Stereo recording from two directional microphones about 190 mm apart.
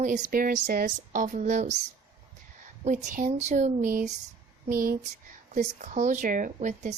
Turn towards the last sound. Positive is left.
turn(degrees=-40)  # may be behind; listen again after turning